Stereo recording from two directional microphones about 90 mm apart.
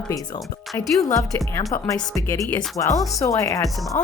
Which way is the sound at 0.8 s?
Centre (ahead or behind).